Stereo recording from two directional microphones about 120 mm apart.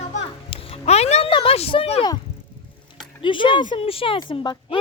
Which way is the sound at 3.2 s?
45° left (ahead or behind).